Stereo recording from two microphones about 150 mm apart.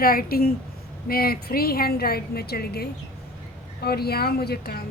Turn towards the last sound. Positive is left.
turn(degrees=90)